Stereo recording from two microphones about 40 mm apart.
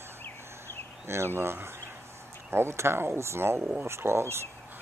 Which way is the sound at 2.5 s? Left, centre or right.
Right.